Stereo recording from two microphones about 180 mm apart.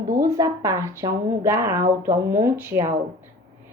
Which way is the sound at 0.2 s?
15° right (ahead or behind).